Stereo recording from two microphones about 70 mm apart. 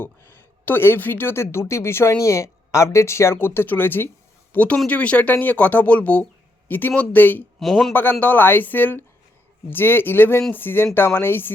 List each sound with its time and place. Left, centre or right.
0.0 s a woman's voice: left
7.6 s a man's voice: centre
8.2 s a woman's voice: left